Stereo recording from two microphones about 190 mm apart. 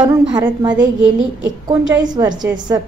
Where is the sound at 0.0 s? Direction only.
20° right (ahead or behind).